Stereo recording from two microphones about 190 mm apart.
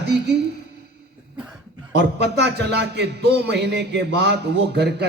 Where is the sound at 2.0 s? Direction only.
60° right (ahead or behind).